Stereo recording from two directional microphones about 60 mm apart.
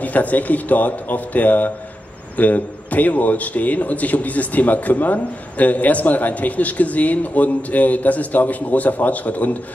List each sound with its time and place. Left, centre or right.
0.0 s a man's voice: left